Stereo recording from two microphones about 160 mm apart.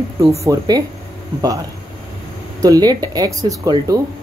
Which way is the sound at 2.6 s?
25° right (ahead or behind).